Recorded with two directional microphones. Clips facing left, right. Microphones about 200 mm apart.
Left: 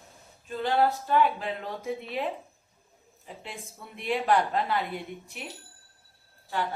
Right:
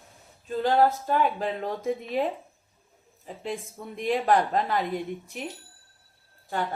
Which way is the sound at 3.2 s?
45° right (ahead or behind).